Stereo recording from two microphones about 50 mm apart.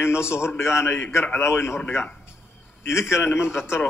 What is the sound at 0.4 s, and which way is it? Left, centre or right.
A man's voice, left.